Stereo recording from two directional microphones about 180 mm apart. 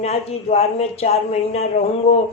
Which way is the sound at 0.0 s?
35° left (ahead or behind).